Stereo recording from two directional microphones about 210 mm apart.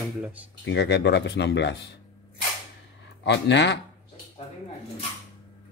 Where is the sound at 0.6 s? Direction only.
55° left (ahead or behind).